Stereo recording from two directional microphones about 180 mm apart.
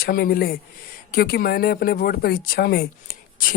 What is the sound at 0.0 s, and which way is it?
Speech, 55° left (ahead or behind).